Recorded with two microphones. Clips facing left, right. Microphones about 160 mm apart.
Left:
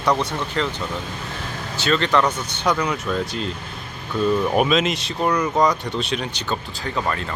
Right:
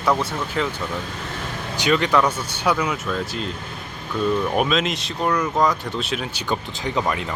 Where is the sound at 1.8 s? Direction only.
15° right (ahead or behind).